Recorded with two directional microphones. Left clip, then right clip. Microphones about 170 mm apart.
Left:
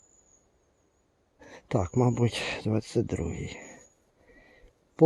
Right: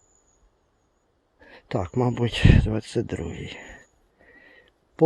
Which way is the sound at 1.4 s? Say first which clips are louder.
Even; 25° left (ahead or behind).